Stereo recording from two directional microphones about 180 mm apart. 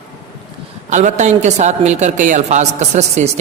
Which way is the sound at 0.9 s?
40° right (ahead or behind).